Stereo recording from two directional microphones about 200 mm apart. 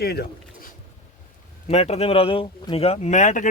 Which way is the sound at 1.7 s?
30° left (ahead or behind).